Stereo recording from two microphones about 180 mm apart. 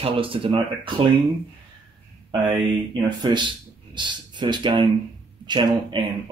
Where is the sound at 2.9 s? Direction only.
25° right (ahead or behind).